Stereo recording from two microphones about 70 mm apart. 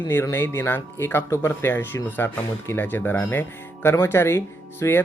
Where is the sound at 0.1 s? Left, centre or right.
Left.